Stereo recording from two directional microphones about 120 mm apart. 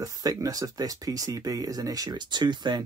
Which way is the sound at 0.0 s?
30° right (ahead or behind).